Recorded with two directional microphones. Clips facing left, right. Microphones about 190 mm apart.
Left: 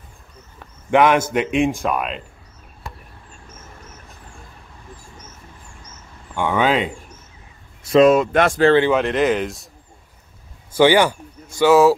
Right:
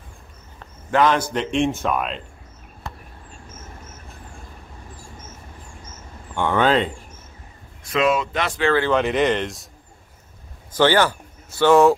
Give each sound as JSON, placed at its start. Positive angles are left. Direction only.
{"t": 0.9, "sound": "speech", "side_deg": 15}
{"t": 6.3, "sound": "speech", "side_deg": 10}
{"t": 7.9, "sound": "speech", "side_deg": 40}
{"t": 8.9, "sound": "speech", "side_deg": 0}
{"t": 10.8, "sound": "speech", "side_deg": 15}